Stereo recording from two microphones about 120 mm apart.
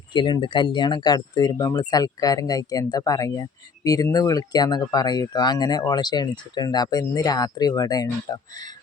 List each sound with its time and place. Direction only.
0.1 s speech: 40° left (ahead or behind)